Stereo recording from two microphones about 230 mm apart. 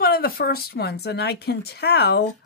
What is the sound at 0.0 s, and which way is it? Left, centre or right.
Speech, left.